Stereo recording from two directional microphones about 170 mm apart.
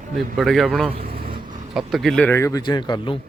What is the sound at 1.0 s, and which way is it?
Vehicle, 30° right (ahead or behind).